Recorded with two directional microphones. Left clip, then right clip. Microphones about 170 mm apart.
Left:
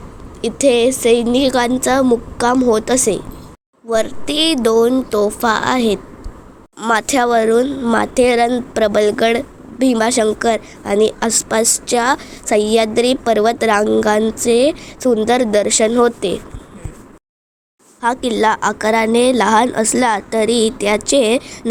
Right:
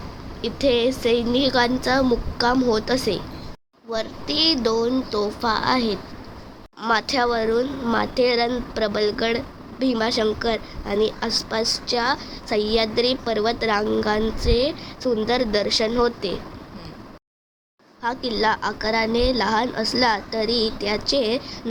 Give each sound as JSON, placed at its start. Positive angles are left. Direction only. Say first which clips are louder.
{"t": 0.4, "sound": "speech", "louder": "left 7 dB", "side_deg": 45}
{"t": 18.0, "sound": "speech", "louder": "left 7 dB", "side_deg": 50}